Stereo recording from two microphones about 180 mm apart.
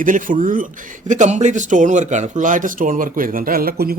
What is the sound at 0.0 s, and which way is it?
Speech, 45° right (ahead or behind).